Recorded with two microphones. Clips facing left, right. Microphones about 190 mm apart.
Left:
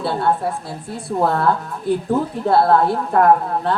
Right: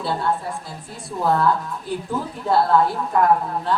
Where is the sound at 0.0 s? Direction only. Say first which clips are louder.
Left 4 dB; 60° left (ahead or behind).